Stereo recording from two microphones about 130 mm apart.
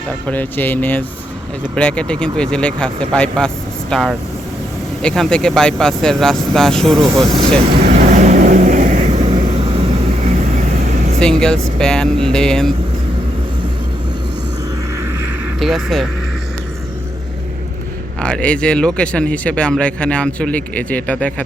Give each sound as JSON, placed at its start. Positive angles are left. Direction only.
{"t": 0.3, "sound": "speech", "side_deg": 15}
{"t": 7.9, "sound": "vehicle", "side_deg": -70}
{"t": 11.2, "sound": "speech", "side_deg": 5}
{"t": 15.6, "sound": "speech", "side_deg": 0}
{"t": 18.2, "sound": "speech", "side_deg": 10}